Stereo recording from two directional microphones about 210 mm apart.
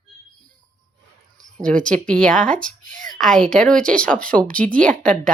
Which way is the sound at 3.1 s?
Centre (ahead or behind).